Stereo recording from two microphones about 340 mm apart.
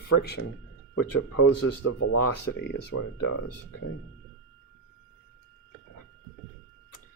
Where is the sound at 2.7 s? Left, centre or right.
Left.